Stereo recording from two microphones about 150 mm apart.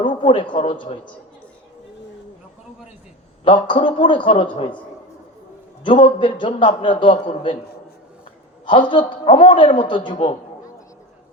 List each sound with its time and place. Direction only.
0.2 s a man's voice: 35° left (ahead or behind)
3.4 s a man's voice: 35° left (ahead or behind)
5.8 s a man's voice: 35° left (ahead or behind)
8.6 s a man's voice: 35° left (ahead or behind)